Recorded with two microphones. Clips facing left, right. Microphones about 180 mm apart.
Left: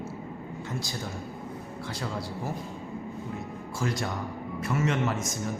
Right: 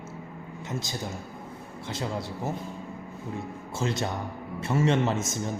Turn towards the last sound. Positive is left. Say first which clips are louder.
# right 3 dB
turn(degrees=-25)  # may be behind; listen again after turning